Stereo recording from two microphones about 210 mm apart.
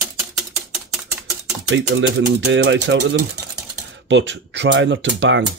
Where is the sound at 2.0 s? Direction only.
55° right (ahead or behind).